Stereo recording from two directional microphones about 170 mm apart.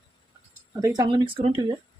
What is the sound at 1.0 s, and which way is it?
Speech, 30° right (ahead or behind).